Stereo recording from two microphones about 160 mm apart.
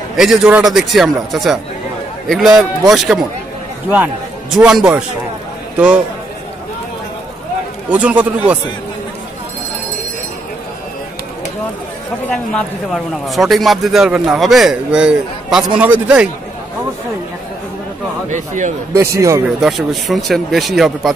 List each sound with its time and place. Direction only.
0.1 s a man's voice: 5° right (ahead or behind)
7.9 s speech: 10° right (ahead or behind)
12.3 s a man's voice: 5° left (ahead or behind)
18.3 s a man's voice: 50° right (ahead or behind)
18.9 s a man's voice: 20° right (ahead or behind)
19.6 s a man's voice: centre (ahead or behind)